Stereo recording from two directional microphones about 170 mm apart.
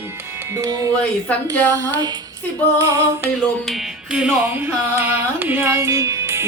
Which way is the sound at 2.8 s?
20° right (ahead or behind).